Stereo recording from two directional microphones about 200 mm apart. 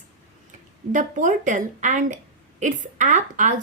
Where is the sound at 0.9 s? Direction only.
40° right (ahead or behind).